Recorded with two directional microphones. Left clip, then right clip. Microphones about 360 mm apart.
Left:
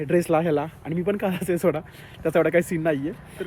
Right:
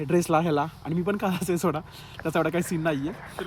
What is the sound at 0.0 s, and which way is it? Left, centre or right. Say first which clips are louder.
Speech: left 2 dB; centre.